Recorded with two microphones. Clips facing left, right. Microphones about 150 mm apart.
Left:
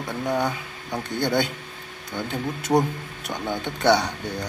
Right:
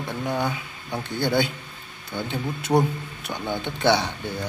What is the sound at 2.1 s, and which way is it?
Speech, centre (ahead or behind).